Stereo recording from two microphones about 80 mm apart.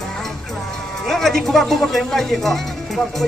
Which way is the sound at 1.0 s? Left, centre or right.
Centre.